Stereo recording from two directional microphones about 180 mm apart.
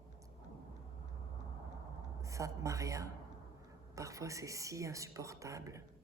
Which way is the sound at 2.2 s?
15° right (ahead or behind).